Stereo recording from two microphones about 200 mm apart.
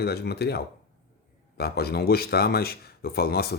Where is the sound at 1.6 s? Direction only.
55° left (ahead or behind).